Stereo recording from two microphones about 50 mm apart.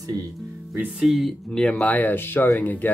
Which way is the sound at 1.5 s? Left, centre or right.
Left.